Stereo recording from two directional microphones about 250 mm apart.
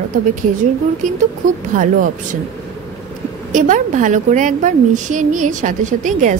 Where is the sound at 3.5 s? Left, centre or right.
Right.